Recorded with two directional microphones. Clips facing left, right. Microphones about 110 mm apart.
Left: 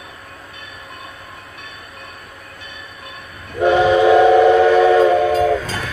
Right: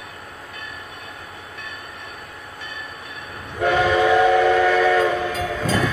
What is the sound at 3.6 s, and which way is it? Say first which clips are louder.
Train: left 5 dB; 20° left (ahead or behind).